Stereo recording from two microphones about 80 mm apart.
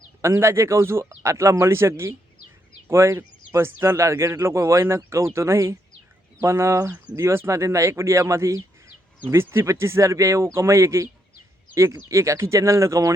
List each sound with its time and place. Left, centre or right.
0.2 s speech: right